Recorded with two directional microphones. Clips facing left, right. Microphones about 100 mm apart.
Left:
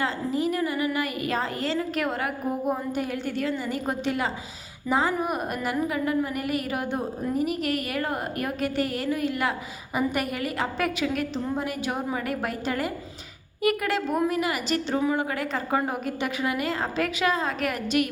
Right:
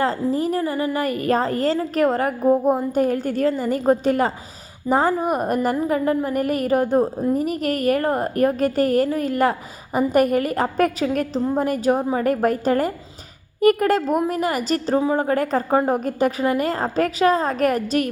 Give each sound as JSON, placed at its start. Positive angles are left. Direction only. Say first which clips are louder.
{"t": 0.0, "sound": "a woman's voice", "louder": "right 5 dB", "side_deg": -40}